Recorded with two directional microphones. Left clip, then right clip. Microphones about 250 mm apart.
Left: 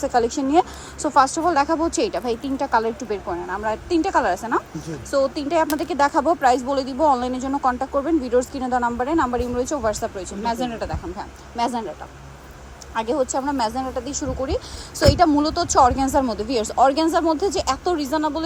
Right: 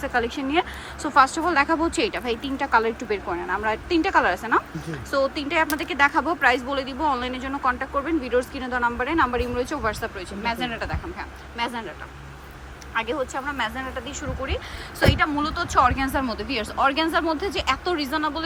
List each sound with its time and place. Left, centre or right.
0.0 s speech: centre
12.9 s speech: left